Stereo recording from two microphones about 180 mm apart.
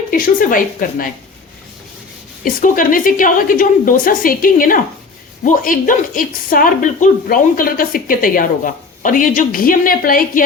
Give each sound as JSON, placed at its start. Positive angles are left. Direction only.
{"t": 0.1, "sound": "speech", "side_deg": 50}
{"t": 2.4, "sound": "speech", "side_deg": 50}